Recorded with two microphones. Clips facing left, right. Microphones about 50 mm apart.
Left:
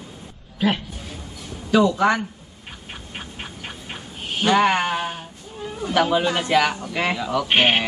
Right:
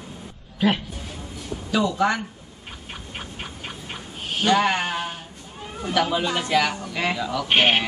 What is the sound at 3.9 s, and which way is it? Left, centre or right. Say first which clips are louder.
Speech: left 1 dB; centre.